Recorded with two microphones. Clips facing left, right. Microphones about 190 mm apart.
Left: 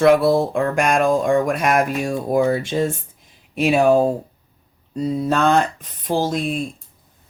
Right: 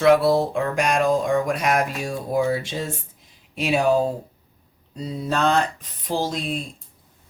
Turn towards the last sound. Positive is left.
turn(degrees=50)  # may be behind; listen again after turning